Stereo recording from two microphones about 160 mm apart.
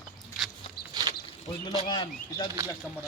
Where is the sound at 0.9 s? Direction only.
25° right (ahead or behind).